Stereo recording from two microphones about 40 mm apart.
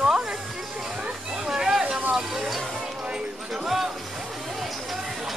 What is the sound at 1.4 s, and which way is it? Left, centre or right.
Speech, centre.